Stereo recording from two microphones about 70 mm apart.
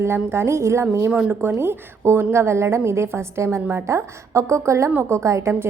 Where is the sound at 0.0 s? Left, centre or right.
Right.